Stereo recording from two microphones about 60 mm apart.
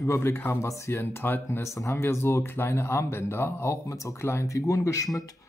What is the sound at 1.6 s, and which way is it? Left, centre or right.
Speech, left.